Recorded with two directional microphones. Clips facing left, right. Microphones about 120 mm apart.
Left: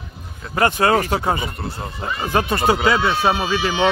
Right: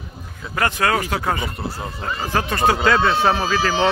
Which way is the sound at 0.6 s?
25° left (ahead or behind).